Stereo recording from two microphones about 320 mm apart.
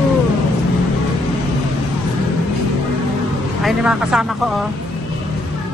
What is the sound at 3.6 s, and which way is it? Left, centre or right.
Speech, centre.